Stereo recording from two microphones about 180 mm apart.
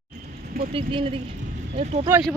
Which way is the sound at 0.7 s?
30° right (ahead or behind).